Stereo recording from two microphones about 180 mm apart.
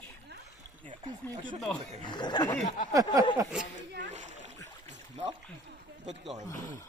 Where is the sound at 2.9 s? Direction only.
20° right (ahead or behind).